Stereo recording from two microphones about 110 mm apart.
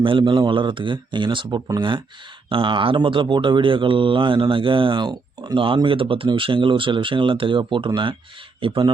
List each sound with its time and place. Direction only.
0.0 s speech: 50° right (ahead or behind)
8.6 s speech: 50° right (ahead or behind)